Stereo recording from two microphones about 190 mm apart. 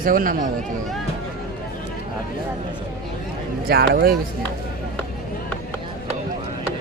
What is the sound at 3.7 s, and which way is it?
Speech, 55° right (ahead or behind).